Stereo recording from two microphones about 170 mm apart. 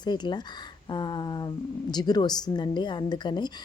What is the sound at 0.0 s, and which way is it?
A woman's voice, 25° left (ahead or behind).